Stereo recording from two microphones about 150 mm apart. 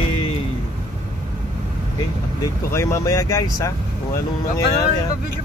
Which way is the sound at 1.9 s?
20° left (ahead or behind).